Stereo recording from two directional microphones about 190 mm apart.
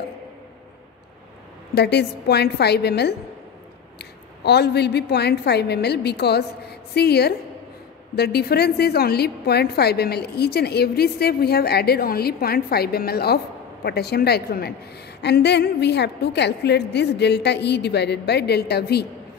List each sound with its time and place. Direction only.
1.8 s a woman's voice: 60° left (ahead or behind)